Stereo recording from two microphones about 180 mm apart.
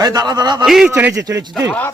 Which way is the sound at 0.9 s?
15° right (ahead or behind).